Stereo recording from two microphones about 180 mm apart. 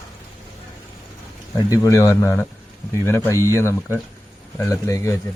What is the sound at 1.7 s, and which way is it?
Speech, 15° left (ahead or behind).